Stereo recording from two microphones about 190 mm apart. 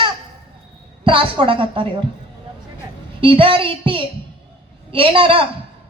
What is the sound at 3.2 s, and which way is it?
A man's voice, 30° right (ahead or behind).